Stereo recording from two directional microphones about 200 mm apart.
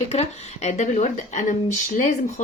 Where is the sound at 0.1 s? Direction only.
35° left (ahead or behind).